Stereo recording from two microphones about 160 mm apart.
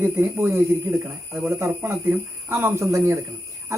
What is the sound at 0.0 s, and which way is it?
Speech, 15° right (ahead or behind).